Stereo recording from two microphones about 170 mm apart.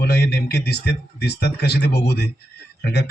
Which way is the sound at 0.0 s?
70° left (ahead or behind).